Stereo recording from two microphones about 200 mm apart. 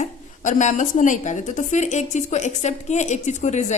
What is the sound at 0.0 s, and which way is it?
A woman's voice, 40° left (ahead or behind).